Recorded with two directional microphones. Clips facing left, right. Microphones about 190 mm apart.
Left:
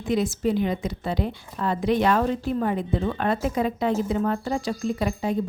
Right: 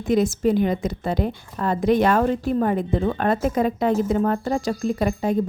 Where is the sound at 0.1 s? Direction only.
45° right (ahead or behind).